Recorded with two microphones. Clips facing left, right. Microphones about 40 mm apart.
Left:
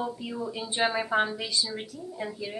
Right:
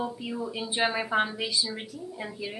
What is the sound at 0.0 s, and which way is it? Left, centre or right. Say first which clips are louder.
A woman's voice: even; centre.